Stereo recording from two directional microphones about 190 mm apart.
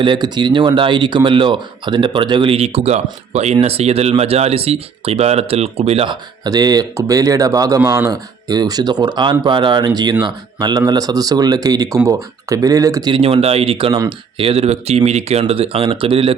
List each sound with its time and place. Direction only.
0.0 s speech: 25° right (ahead or behind)